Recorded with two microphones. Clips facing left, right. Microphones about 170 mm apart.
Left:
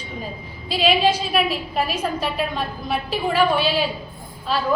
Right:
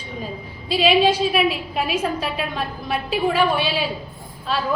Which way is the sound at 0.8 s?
Centre (ahead or behind).